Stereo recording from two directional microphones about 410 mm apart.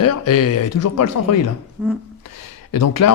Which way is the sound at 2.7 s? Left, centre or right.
Left.